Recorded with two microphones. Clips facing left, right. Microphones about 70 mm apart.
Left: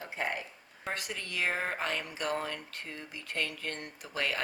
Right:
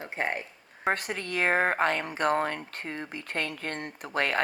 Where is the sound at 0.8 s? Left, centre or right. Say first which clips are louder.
Right 9 dB; right.